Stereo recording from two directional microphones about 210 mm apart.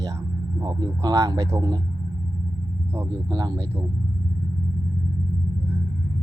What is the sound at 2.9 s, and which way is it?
Speech, 15° right (ahead or behind).